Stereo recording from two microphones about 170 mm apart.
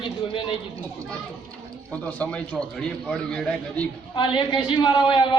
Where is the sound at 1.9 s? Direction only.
10° left (ahead or behind).